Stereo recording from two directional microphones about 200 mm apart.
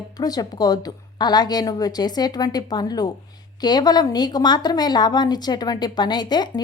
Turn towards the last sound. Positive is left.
turn(degrees=20)  # may be behind; listen again after turning